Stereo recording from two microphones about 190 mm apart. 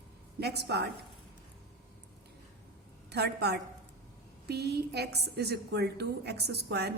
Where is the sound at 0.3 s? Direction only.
60° right (ahead or behind).